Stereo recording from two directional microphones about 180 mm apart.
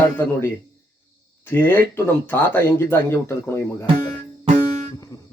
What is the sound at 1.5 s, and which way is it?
Speech, 10° left (ahead or behind).